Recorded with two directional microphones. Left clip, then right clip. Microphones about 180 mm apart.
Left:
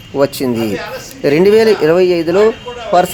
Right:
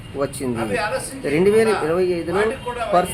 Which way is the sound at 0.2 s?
45° left (ahead or behind).